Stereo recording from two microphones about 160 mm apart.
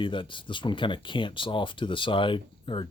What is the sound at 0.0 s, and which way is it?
Speech, 30° left (ahead or behind).